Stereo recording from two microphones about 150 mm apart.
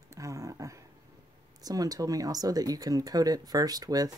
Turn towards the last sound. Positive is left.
turn(degrees=-25)  # may be behind; listen again after turning